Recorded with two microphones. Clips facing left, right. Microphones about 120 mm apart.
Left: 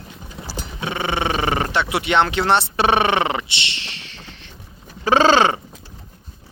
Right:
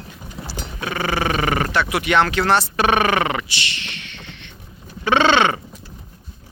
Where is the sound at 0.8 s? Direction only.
25° left (ahead or behind).